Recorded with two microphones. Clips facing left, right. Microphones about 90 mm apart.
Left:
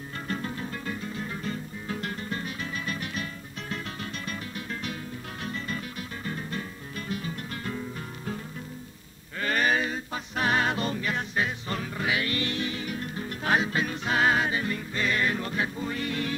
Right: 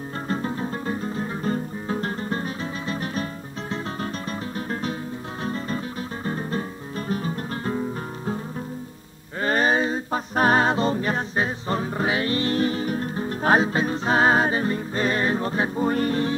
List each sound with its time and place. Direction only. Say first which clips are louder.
0.3 s music: right 6 dB; 30° right (ahead or behind)
9.4 s music: right 5 dB; 30° right (ahead or behind)